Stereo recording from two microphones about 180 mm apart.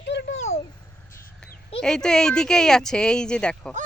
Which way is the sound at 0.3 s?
40° left (ahead or behind).